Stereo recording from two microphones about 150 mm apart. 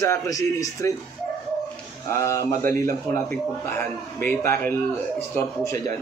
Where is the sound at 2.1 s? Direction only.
20° left (ahead or behind).